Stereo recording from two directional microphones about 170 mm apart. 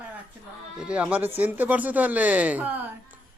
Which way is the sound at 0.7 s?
5° right (ahead or behind).